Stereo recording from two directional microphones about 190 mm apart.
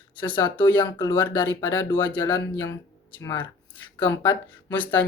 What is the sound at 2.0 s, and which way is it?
Speech, 25° left (ahead or behind).